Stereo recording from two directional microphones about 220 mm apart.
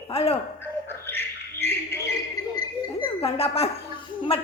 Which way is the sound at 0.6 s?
10° left (ahead or behind).